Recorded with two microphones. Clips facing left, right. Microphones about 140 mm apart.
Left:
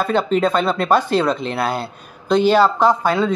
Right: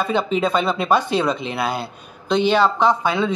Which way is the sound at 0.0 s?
Centre (ahead or behind).